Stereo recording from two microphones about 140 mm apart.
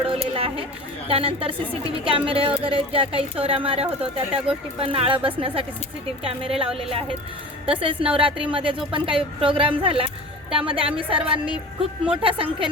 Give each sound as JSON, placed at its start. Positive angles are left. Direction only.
{"t": 0.1, "sound": "a sound", "side_deg": -40}
{"t": 1.1, "sound": "speech", "side_deg": -40}
{"t": 11.2, "sound": "a woman's voice", "side_deg": -10}
{"t": 12.2, "sound": "speech", "side_deg": -40}